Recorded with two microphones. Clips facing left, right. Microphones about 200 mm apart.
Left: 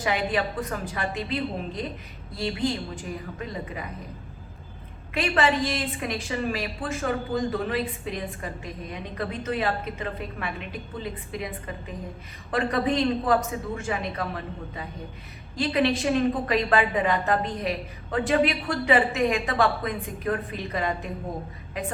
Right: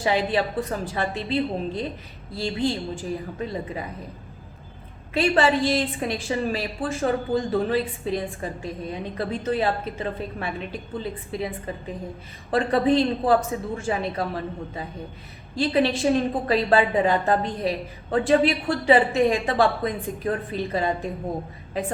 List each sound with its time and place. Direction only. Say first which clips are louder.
0.0 s a woman's voice: right 3 dB; 30° right (ahead or behind)
5.1 s a woman's voice: right 4 dB; 30° right (ahead or behind)